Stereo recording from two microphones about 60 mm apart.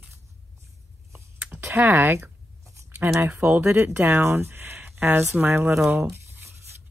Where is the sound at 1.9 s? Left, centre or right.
Right.